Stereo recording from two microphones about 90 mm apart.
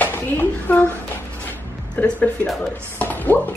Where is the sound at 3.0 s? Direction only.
20° left (ahead or behind).